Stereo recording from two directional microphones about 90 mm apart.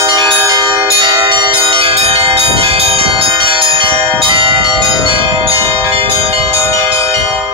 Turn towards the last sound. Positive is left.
turn(degrees=-90)